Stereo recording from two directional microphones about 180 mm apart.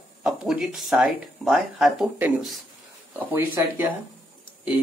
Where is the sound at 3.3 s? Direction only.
15° right (ahead or behind).